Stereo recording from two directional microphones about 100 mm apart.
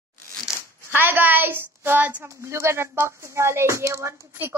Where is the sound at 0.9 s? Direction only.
20° right (ahead or behind).